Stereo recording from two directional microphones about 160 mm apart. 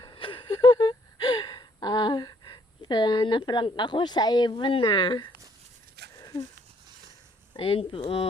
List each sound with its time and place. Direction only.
0.0 s gasp: 30° left (ahead or behind)
6.0 s a sound: 90° right
7.5 s speech: 35° left (ahead or behind)